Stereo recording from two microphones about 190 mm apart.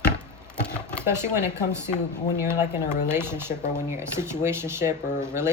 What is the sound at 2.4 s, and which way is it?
Speech, 10° right (ahead or behind).